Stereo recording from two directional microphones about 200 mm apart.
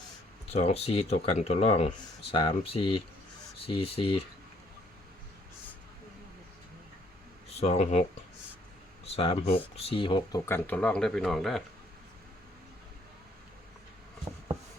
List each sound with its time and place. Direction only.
0.5 s speech: 30° left (ahead or behind)
7.5 s speech: 30° left (ahead or behind)
9.1 s speech: 30° left (ahead or behind); by 11.6 s centre (ahead or behind)